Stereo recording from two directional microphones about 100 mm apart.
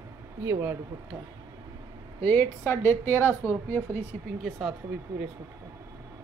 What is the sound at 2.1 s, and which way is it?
A woman's voice, 20° left (ahead or behind).